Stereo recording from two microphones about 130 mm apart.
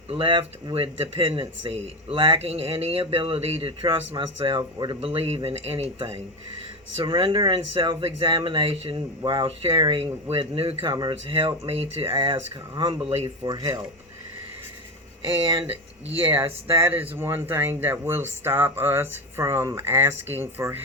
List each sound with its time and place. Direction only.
0.1 s speech: 40° right (ahead or behind)
4.9 s speech: 50° right (ahead or behind)
6.9 s speech: 40° right (ahead or behind)
9.2 s speech: 30° right (ahead or behind)
13.1 s speech: 50° right (ahead or behind)
13.4 s speech: 30° right (ahead or behind)
15.7 s speech: 45° right (ahead or behind)
16.3 s speech: 20° right (ahead or behind)